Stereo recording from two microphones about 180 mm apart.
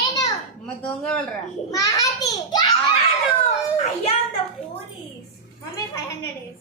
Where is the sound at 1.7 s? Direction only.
20° left (ahead or behind).